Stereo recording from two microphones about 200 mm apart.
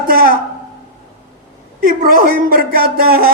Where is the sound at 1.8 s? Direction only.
45° right (ahead or behind).